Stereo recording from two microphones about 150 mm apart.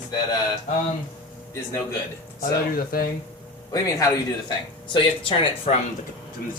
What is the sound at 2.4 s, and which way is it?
Speech, 80° left.